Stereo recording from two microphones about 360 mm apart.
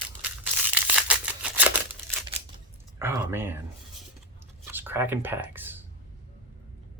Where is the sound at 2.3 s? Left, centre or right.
Centre.